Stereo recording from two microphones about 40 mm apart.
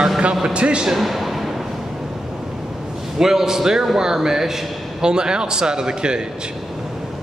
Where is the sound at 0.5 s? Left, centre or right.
Right.